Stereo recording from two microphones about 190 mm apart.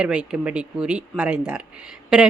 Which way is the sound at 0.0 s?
5° right (ahead or behind).